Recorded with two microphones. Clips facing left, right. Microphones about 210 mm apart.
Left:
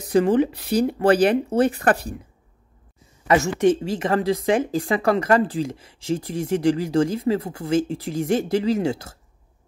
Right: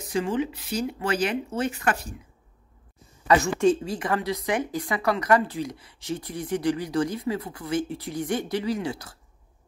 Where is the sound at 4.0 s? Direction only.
30° left (ahead or behind).